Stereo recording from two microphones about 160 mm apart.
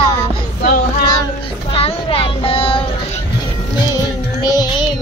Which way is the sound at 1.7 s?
35° left (ahead or behind).